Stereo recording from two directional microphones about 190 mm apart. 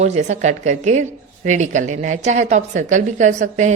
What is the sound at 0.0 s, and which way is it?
A woman's voice, 35° right (ahead or behind).